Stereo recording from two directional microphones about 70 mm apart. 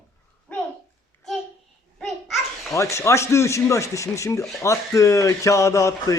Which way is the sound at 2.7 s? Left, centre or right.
Left.